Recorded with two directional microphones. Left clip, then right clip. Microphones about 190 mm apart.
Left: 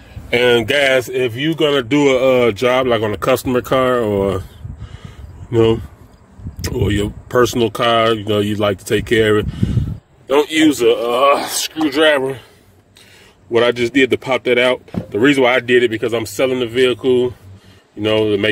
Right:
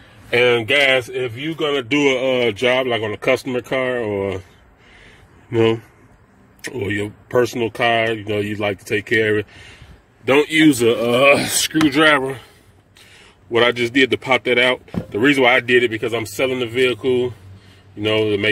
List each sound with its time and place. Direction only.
0.3 s speech: 15° left (ahead or behind)
1.1 s speech: 40° left (ahead or behind)
1.9 s speech: 15° left (ahead or behind)
2.9 s speech: 30° left (ahead or behind)
5.5 s speech: 10° left (ahead or behind)
6.6 s speech: 25° left (ahead or behind)
10.9 s speech: 15° right (ahead or behind)
11.9 s speech: 15° left (ahead or behind)
13.5 s speech: 20° left (ahead or behind)
15.8 s speech: 35° left (ahead or behind)